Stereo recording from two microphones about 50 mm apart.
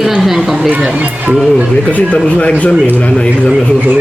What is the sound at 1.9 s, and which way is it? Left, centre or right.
Speech, left.